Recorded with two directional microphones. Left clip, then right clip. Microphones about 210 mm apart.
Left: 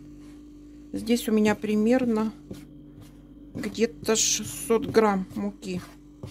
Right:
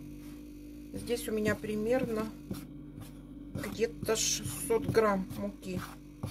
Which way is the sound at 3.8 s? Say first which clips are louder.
Left 7 dB; 50° left (ahead or behind).